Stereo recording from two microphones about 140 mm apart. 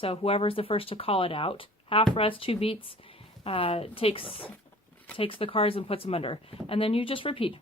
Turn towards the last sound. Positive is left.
turn(degrees=40)  # may be behind; listen again after turning